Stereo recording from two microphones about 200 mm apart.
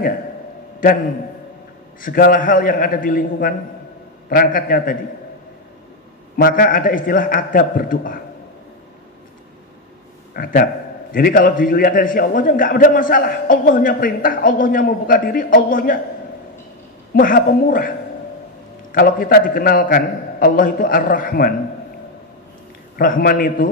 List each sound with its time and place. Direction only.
2.0 s a man's voice: 45° left (ahead or behind)
6.3 s a man's voice: 45° left (ahead or behind)
10.3 s a man's voice: 45° left (ahead or behind)
17.1 s a man's voice: 45° left (ahead or behind)
22.9 s a man's voice: 45° left (ahead or behind)